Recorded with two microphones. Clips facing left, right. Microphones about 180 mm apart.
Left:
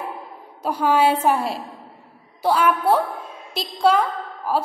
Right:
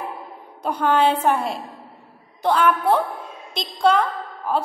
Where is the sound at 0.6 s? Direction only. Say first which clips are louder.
Even; 5° left (ahead or behind).